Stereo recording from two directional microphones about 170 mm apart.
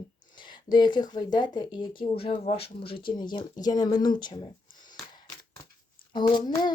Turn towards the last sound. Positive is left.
turn(degrees=25)  # may be behind; listen again after turning